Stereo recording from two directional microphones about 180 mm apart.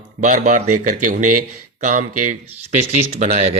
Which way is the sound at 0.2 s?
45° right (ahead or behind).